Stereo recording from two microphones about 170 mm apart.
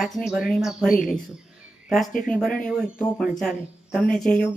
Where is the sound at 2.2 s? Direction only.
5° left (ahead or behind).